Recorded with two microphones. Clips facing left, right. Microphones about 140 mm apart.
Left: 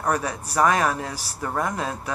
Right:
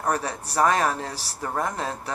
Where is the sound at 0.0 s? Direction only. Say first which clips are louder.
Left 1 dB; 35° right (ahead or behind).